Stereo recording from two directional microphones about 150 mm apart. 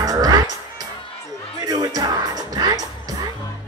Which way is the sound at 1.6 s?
25° right (ahead or behind).